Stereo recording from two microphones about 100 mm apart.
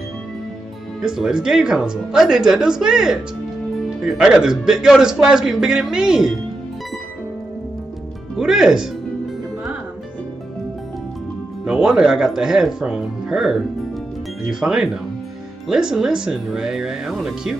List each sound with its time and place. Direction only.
1.0 s a man's voice: 5° right (ahead or behind)
8.4 s a man's voice: 5° right (ahead or behind)
11.6 s a man's voice: 5° right (ahead or behind)